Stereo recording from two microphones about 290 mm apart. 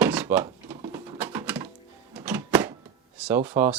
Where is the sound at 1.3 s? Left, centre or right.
Centre.